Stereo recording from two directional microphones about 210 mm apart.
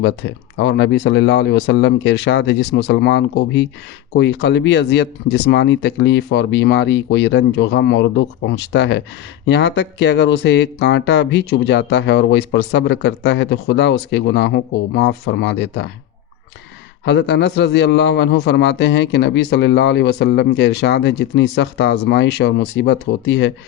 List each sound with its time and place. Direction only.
0.0 s speech: 55° left (ahead or behind)
17.1 s speech: 55° left (ahead or behind)